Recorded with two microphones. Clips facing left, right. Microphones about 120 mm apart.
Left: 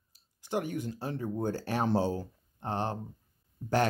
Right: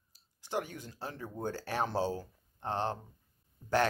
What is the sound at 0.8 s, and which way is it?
Speech, 15° left (ahead or behind).